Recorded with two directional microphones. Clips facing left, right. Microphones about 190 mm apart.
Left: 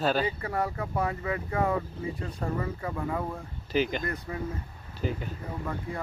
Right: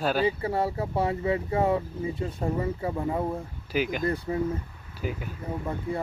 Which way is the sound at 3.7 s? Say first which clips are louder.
Even; 5° right (ahead or behind).